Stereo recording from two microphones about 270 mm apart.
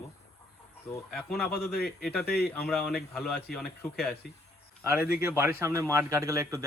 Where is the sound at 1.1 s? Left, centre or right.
Centre.